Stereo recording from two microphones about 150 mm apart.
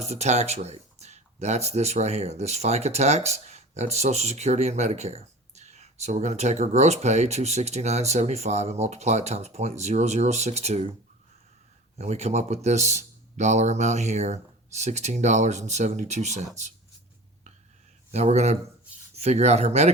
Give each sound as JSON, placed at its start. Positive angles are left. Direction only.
{"t": 0.0, "sound": "speech", "side_deg": -45}
{"t": 11.9, "sound": "speech", "side_deg": -50}
{"t": 18.1, "sound": "speech", "side_deg": -45}